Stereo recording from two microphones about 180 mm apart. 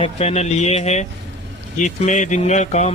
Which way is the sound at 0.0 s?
35° left (ahead or behind).